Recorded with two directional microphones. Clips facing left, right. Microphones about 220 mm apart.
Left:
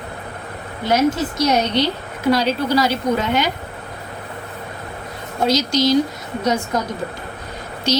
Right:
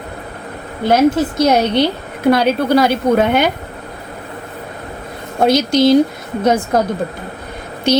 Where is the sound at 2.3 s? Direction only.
55° right (ahead or behind).